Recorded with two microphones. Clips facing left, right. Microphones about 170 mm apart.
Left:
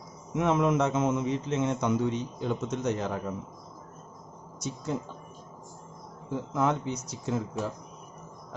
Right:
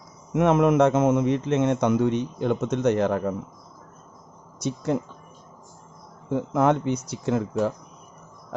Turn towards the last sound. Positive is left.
turn(degrees=-65)  # may be behind; listen again after turning